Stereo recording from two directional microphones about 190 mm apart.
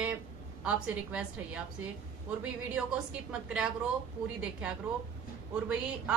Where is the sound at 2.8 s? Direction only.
5° right (ahead or behind).